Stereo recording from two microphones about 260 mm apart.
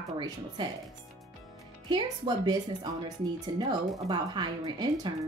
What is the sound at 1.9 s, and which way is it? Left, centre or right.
Speech, centre.